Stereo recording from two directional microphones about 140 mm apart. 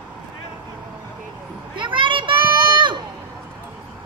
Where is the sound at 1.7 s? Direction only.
35° right (ahead or behind).